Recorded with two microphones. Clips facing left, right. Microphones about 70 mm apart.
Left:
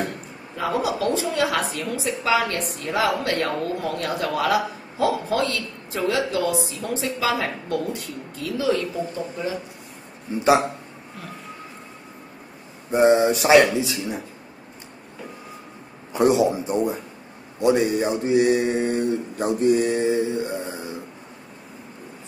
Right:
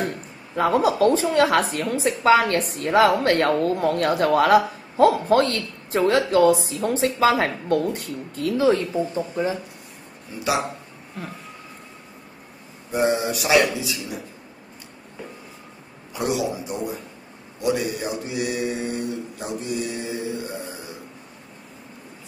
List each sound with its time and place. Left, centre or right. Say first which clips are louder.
0.6 s speech: right 5 dB; right
8.7 s speech: right 2 dB; right
12.9 s speech: left 5 dB; left
16.1 s speech: left 6 dB; left
20.2 s speech: left 5 dB; left